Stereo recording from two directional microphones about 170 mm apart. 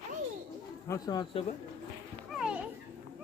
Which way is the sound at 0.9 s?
20° left (ahead or behind).